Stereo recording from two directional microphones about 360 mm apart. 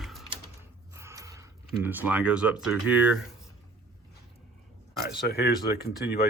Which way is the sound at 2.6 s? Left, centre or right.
Centre.